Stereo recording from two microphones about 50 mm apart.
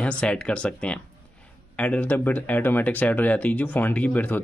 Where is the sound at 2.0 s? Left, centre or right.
Left.